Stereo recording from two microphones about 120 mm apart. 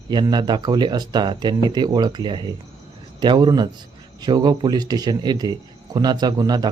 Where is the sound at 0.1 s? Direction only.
35° right (ahead or behind).